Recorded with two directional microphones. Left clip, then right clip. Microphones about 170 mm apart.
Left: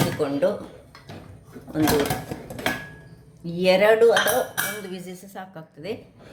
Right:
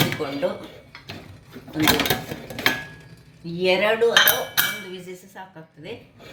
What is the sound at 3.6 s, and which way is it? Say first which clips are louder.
Speech: left 3 dB; 90° left.